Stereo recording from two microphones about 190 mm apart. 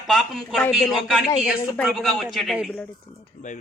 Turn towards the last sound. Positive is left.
turn(degrees=40)  # may be behind; listen again after turning